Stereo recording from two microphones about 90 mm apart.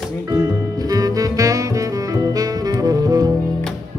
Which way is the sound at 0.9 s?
40° right (ahead or behind).